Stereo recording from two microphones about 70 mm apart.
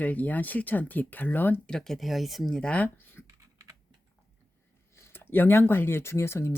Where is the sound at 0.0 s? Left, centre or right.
Left.